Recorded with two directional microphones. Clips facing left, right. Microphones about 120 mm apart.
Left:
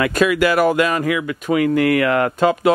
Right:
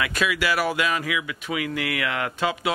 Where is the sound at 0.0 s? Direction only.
50° left (ahead or behind).